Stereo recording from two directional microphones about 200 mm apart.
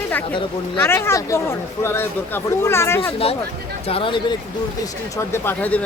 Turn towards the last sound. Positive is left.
turn(degrees=10)  # may be behind; listen again after turning